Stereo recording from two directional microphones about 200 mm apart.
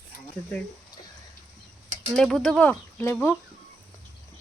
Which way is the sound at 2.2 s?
Centre (ahead or behind).